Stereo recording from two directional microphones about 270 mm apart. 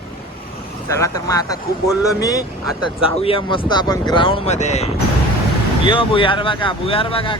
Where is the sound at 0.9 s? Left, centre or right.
Centre.